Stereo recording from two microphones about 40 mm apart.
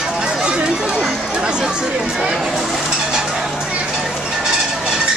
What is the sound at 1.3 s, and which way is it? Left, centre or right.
Chatter, right.